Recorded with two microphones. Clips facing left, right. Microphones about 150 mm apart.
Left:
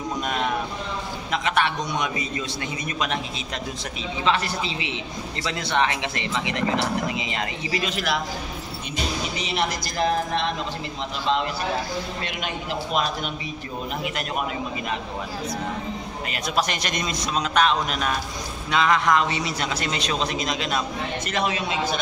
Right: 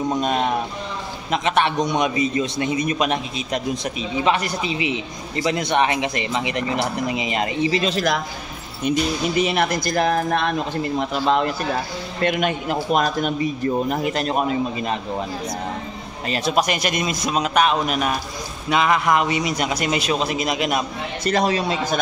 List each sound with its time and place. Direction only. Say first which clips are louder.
0.2 s a man's voice: right 5 dB; 30° right (ahead or behind)
7.9 s a man's voice: right 5 dB; 40° right (ahead or behind)
8.8 s a man's voice: right 9 dB; 55° right (ahead or behind); by 15.0 s 35° right (ahead or behind)
16.3 s a man's voice: right 10 dB; 30° right (ahead or behind)
16.5 s a man's voice: right 3 dB; 10° right (ahead or behind)
21.2 s speech: right 8 dB; 35° right (ahead or behind)